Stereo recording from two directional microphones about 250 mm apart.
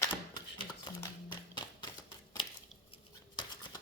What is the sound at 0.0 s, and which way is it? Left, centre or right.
Typewriter, centre.